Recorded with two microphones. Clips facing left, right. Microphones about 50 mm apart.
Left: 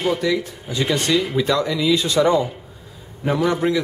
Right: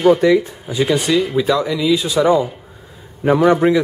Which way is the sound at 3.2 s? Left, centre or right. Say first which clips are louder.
Right 7 dB; right.